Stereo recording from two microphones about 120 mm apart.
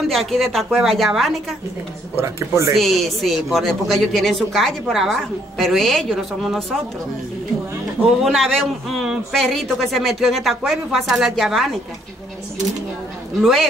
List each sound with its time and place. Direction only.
0.1 s speech: centre (ahead or behind)
2.1 s speech: 25° right (ahead or behind)
2.7 s speech: centre (ahead or behind)
8.2 s speech: centre (ahead or behind)
13.4 s speech: centre (ahead or behind)